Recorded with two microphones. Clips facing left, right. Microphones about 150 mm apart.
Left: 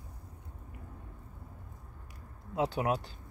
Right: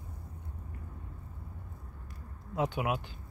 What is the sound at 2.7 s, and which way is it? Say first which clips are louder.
Speech: left 2 dB; 35° left (ahead or behind).